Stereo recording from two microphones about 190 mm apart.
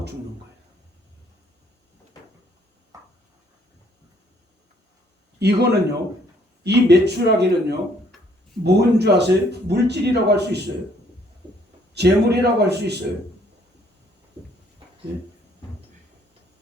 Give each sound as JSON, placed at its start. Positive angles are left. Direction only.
{"t": 2.9, "sound": "a sound", "side_deg": -20}
{"t": 5.4, "sound": "a man's voice", "side_deg": -60}
{"t": 11.9, "sound": "speech", "side_deg": -60}